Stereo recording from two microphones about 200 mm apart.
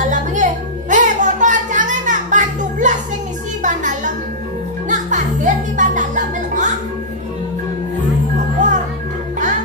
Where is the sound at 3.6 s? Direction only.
40° right (ahead or behind).